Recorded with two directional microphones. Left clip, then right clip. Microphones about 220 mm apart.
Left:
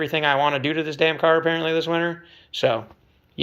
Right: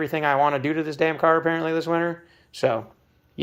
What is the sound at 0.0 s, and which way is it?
Speech, 20° right (ahead or behind).